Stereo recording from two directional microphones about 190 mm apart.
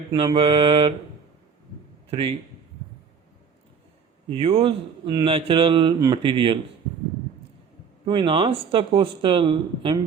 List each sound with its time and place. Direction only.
0.1 s speech: 25° right (ahead or behind)
2.0 s a man's voice: 30° right (ahead or behind)
4.4 s speech: 30° right (ahead or behind)
8.0 s speech: 25° right (ahead or behind)